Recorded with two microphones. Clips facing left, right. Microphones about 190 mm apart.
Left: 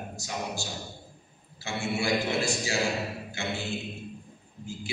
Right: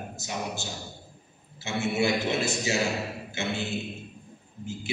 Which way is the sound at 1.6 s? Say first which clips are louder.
Right 4 dB; 20° right (ahead or behind).